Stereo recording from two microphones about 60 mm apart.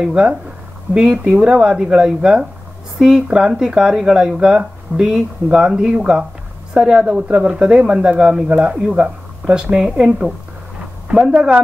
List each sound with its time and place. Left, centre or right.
0.0 s speech: centre